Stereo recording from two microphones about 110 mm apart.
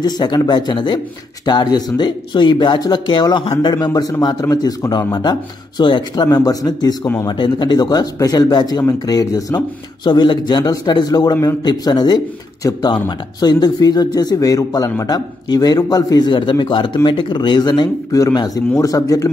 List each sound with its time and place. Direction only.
0.0 s speech: 40° left (ahead or behind)
10.0 s a man's voice: 45° left (ahead or behind)